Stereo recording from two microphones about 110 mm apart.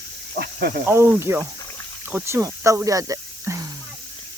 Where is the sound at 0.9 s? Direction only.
25° right (ahead or behind).